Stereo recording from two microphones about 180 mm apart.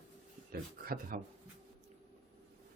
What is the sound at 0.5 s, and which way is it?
Speech, 55° right (ahead or behind).